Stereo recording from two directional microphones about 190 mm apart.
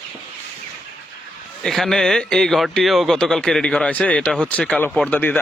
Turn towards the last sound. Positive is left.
turn(degrees=10)  # may be behind; listen again after turning